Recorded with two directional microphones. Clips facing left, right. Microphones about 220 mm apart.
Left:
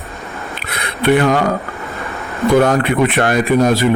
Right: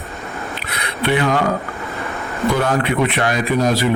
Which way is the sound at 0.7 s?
50° left (ahead or behind).